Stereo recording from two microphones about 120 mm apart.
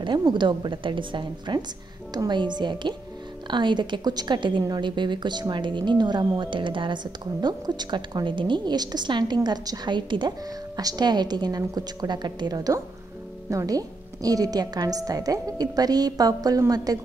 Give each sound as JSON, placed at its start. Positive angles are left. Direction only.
{"t": 0.0, "sound": "a woman's voice", "side_deg": -40}